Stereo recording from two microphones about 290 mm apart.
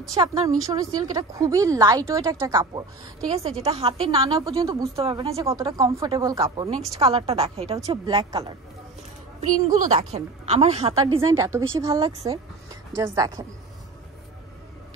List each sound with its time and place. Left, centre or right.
0.1 s a woman's voice: centre
9.8 s a woman's voice: right
11.1 s a woman's voice: centre